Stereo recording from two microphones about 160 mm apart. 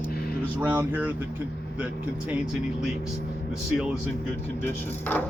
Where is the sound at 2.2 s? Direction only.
5° right (ahead or behind).